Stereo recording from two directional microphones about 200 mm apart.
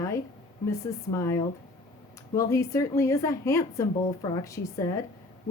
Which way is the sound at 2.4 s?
15° left (ahead or behind).